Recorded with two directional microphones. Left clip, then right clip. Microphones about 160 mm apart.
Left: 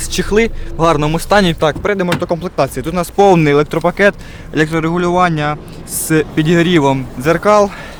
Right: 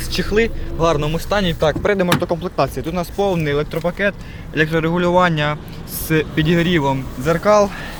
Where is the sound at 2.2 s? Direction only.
55° left (ahead or behind).